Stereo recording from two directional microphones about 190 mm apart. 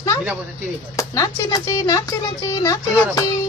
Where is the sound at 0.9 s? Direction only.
15° left (ahead or behind).